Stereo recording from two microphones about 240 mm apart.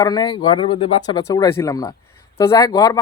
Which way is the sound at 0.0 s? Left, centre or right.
Centre.